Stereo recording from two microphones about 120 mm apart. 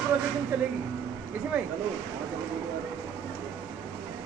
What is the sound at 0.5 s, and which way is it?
Speech, 15° right (ahead or behind).